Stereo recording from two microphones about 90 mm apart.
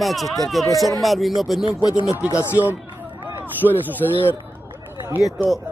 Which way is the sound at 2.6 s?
25° right (ahead or behind).